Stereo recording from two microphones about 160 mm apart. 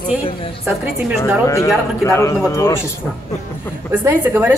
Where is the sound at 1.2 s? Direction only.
20° left (ahead or behind).